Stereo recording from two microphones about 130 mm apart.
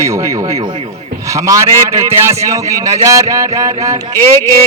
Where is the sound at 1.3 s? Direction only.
25° right (ahead or behind).